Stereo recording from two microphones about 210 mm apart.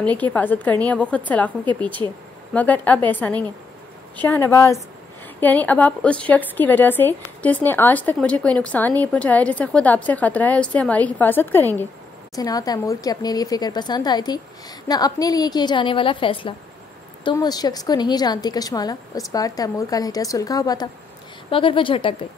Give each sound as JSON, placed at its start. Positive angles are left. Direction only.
{"t": 0.0, "sound": "a woman's voice", "side_deg": 5}
{"t": 2.5, "sound": "a woman's voice", "side_deg": 5}